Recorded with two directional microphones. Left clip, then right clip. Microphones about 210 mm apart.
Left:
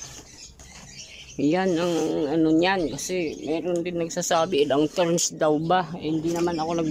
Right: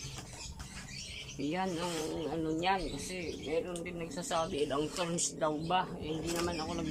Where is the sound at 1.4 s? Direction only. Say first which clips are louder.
Left 13 dB; 55° left (ahead or behind).